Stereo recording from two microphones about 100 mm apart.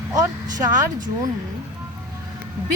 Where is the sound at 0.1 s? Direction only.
35° right (ahead or behind).